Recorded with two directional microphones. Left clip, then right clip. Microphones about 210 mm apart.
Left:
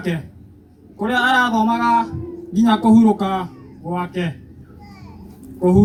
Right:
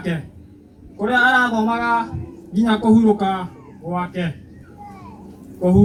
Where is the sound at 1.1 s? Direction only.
50° left (ahead or behind).